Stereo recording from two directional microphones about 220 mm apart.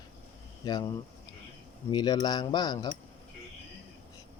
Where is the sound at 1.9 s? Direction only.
20° left (ahead or behind).